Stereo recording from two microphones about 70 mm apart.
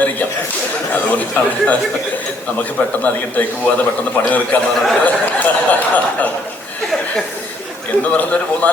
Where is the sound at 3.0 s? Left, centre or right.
Left.